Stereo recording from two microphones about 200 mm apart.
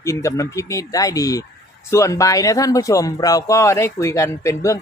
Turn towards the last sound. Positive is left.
turn(degrees=15)  # may be behind; listen again after turning